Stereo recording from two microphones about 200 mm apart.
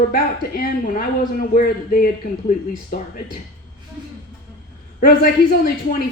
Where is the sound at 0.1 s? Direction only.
45° left (ahead or behind).